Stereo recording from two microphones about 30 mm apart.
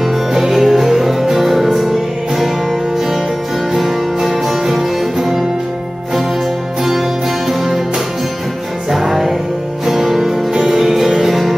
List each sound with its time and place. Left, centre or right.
0.0 s music: centre
3.7 s music: centre
6.8 s music: centre
8.9 s music: centre